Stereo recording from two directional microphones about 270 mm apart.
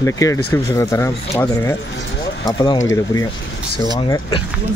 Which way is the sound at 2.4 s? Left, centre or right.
Centre.